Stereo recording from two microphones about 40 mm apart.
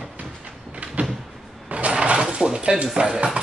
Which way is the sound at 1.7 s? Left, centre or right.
Right.